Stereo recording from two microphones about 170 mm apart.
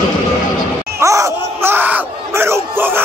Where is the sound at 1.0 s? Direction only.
20° right (ahead or behind).